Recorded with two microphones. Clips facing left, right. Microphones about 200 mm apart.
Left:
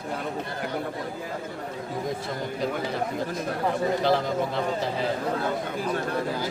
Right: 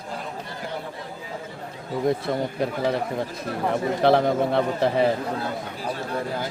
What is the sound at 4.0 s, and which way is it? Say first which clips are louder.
A man's voice: right 5 dB; 60° right (ahead or behind).